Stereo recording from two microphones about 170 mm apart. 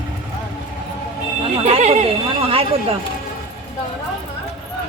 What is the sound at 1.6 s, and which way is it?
Speech, 40° right (ahead or behind).